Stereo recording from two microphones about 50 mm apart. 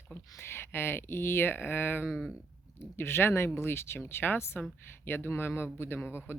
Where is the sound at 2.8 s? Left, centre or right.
Left.